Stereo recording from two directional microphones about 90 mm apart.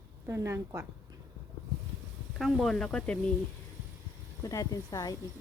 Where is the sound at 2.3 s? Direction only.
Centre (ahead or behind).